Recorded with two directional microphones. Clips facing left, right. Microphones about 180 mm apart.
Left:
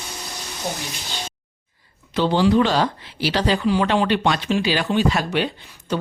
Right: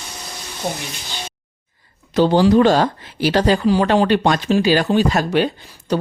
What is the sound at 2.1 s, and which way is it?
Speech, 40° right (ahead or behind).